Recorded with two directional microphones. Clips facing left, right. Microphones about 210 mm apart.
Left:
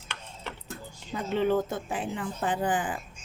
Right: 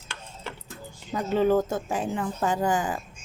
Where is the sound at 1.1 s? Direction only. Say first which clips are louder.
Right 4 dB; 40° right (ahead or behind).